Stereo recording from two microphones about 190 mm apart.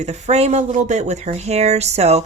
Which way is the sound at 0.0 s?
35° right (ahead or behind).